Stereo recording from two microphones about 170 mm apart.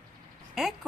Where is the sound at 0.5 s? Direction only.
Centre (ahead or behind).